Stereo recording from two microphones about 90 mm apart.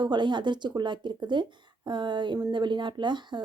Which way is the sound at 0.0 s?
55° right (ahead or behind).